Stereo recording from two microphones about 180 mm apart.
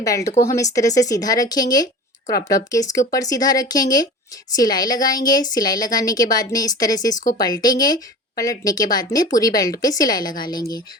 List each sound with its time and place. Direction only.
0.0 s a woman's voice: 20° left (ahead or behind)
3.1 s a woman's voice: 20° left (ahead or behind)